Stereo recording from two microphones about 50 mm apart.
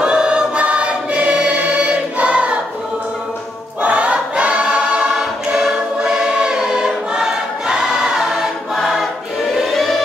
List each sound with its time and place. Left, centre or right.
0.0 s choir: centre
3.8 s choir: right
5.1 s choir: centre
9.7 s a sound: centre